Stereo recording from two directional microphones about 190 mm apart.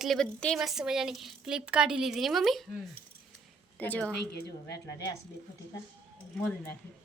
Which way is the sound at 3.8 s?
10° left (ahead or behind).